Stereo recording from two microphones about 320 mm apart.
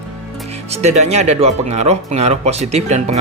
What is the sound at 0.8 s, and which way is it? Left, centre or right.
Speech, right.